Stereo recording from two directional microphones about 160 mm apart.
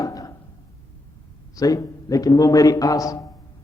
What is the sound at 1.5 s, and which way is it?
A man's voice, 20° left (ahead or behind).